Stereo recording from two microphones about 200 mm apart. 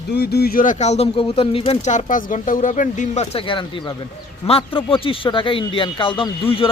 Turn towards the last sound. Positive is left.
turn(degrees=25)  # may be behind; listen again after turning